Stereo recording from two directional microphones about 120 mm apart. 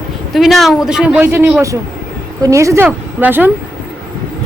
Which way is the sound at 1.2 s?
20° right (ahead or behind).